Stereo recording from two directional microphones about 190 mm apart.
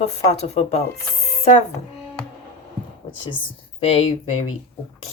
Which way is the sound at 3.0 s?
35° left (ahead or behind).